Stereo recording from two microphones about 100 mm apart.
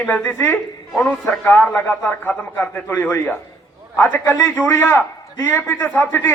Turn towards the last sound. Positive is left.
turn(degrees=20)  # may be behind; listen again after turning